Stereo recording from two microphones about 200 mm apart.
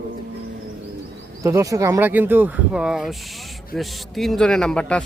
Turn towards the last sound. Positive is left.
turn(degrees=5)  # may be behind; listen again after turning